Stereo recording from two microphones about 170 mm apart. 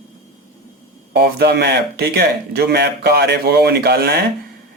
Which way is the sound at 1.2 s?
70° right (ahead or behind).